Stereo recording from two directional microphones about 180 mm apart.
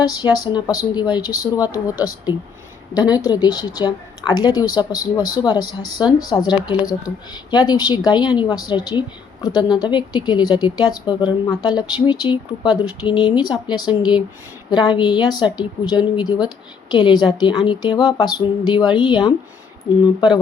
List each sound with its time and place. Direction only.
0.1 s a woman's voice: 25° left (ahead or behind)